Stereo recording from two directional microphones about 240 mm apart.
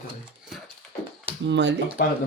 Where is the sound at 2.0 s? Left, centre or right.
Left.